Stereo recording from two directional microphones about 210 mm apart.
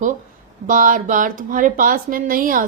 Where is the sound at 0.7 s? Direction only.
40° right (ahead or behind).